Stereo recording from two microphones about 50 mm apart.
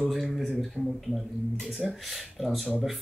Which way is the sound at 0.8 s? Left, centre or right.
Right.